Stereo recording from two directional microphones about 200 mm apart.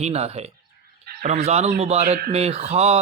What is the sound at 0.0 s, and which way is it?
Speech, 30° right (ahead or behind).